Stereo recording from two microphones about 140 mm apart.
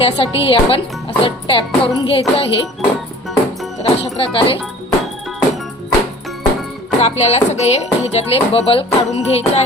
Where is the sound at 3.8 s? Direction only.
45° left (ahead or behind).